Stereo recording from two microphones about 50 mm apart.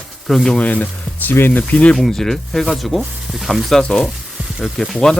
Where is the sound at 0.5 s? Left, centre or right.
Left.